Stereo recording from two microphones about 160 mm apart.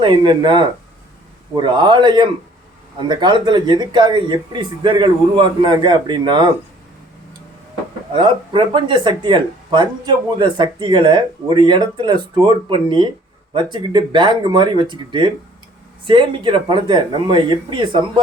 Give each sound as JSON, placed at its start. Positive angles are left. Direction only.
{"t": 0.0, "sound": "speech", "side_deg": -30}
{"t": 8.1, "sound": "speech", "side_deg": -30}